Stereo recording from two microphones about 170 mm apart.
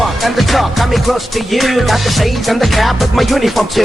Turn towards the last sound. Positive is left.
turn(degrees=0)  # may be behind; listen again after turning